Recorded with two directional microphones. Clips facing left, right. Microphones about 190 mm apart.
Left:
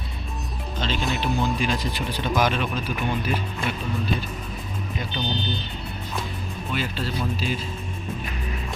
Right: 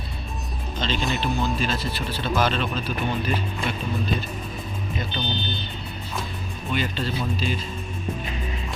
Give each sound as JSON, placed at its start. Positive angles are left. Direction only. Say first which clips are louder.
{"t": 0.8, "sound": "speech", "louder": "even", "side_deg": 5}
{"t": 1.2, "sound": "speech", "louder": "left 1 dB", "side_deg": 15}
{"t": 5.2, "sound": "speech", "louder": "left 1 dB", "side_deg": 40}
{"t": 6.7, "sound": "speech", "louder": "right 1 dB", "side_deg": 5}